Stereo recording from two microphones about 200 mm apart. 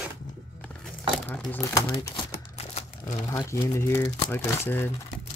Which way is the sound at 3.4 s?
15° left (ahead or behind).